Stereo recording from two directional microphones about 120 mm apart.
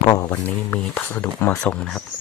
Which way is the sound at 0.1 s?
30° left (ahead or behind).